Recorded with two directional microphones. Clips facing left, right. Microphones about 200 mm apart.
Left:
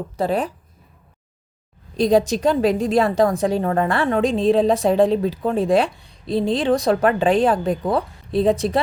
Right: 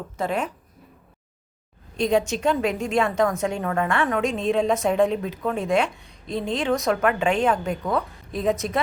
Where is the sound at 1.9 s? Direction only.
35° left (ahead or behind).